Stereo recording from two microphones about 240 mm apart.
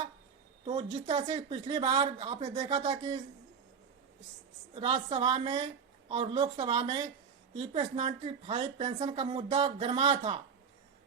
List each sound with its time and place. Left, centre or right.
0.6 s speech: right
4.7 s speech: right